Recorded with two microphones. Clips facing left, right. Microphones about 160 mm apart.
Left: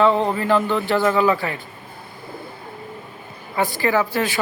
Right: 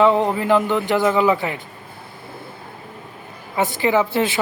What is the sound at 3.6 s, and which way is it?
Speech, 20° right (ahead or behind).